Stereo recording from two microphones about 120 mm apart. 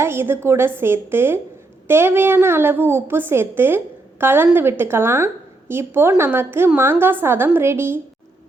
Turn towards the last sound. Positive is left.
turn(degrees=-20)  # may be behind; listen again after turning